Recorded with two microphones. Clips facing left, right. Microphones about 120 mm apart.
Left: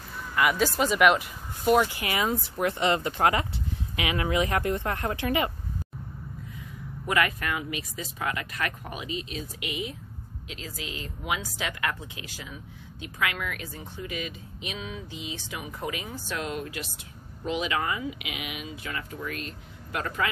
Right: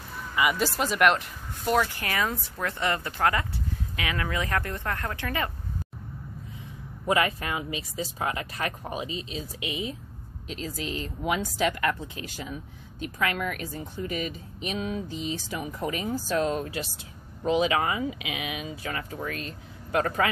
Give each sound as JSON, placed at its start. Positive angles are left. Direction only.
{"t": 0.3, "sound": "speech", "side_deg": 0}
{"t": 6.6, "sound": "speech", "side_deg": -25}